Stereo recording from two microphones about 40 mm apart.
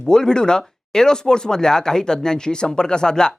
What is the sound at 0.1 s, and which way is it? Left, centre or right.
Speech, centre.